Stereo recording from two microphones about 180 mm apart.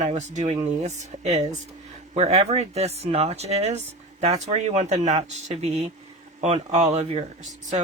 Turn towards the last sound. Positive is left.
turn(degrees=-40)  # may be behind; listen again after turning